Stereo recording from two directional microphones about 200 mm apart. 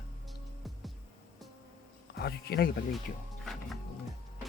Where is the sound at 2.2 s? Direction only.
55° left (ahead or behind).